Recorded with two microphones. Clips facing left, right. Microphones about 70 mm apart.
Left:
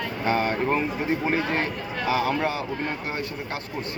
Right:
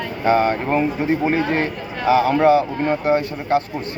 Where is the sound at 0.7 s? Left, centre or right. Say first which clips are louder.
Right 6 dB; right.